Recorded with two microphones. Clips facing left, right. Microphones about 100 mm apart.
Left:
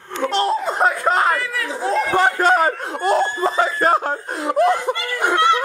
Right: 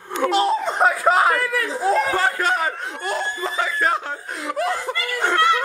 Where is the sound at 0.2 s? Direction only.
5° right (ahead or behind).